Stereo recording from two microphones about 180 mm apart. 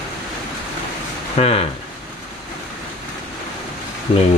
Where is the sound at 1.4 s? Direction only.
35° left (ahead or behind).